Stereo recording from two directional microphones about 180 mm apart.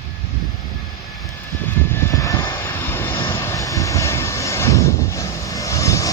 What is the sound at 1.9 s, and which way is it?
Vehicle, 15° left (ahead or behind).